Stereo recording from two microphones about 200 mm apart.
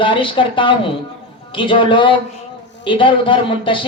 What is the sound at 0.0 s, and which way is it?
A woman's voice, 25° left (ahead or behind).